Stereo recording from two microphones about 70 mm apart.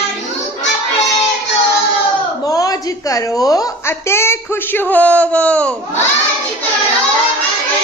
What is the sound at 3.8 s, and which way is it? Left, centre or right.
Speech, left.